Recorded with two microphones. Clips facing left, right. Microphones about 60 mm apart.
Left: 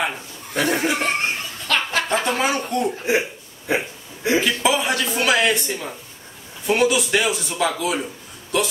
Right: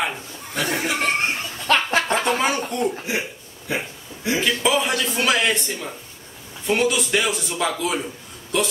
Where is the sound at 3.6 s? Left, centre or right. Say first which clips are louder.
Left 4 dB; left.